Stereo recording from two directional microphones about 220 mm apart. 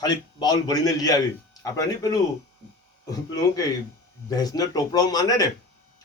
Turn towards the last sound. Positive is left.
turn(degrees=15)  # may be behind; listen again after turning